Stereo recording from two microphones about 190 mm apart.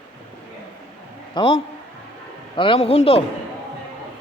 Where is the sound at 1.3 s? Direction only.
30° left (ahead or behind).